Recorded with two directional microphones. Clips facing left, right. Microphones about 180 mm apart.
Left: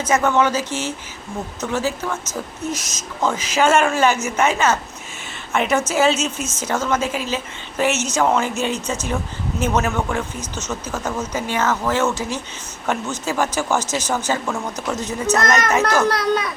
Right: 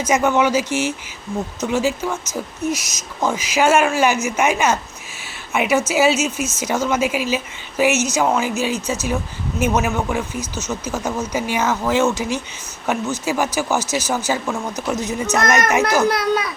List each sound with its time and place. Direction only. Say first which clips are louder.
0.0 s speech: right 1 dB; 10° right (ahead or behind)